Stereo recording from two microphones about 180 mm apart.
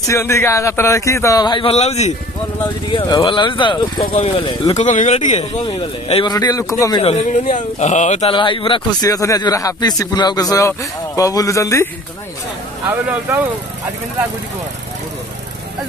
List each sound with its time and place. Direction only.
0.0 s speech: 15° left (ahead or behind); by 2.1 s 35° left (ahead or behind)
2.9 s speech: 25° left (ahead or behind)
6.3 s speech: 20° left (ahead or behind)
7.0 s speech: 30° left (ahead or behind); by 11.9 s 15° left (ahead or behind)
12.9 s speech: 10° right (ahead or behind)